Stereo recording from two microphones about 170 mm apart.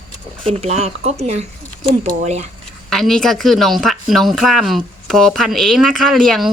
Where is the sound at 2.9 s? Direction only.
Centre (ahead or behind).